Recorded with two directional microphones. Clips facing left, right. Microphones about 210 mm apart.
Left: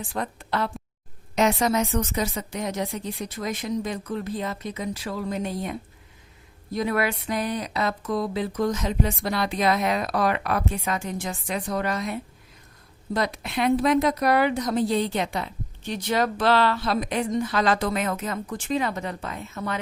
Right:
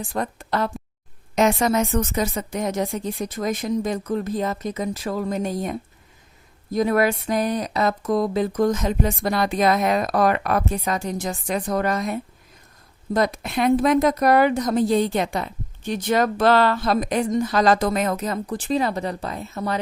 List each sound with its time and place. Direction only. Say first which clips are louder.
0.1 s a woman's voice: right 3 dB; 45° right (ahead or behind)